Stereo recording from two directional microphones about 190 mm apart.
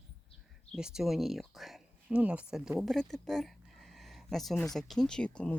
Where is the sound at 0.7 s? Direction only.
5° right (ahead or behind).